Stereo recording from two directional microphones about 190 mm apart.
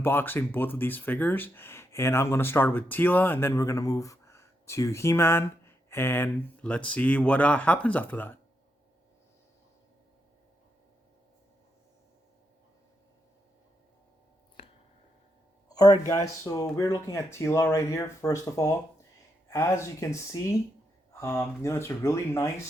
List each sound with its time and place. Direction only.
0.0 s speech: 10° left (ahead or behind)
14.6 s a sound: 30° left (ahead or behind)
15.7 s speech: 20° left (ahead or behind)